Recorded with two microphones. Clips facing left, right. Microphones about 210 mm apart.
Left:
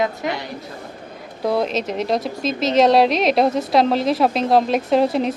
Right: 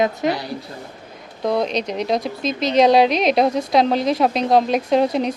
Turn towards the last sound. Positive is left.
turn(degrees=0)  # may be behind; listen again after turning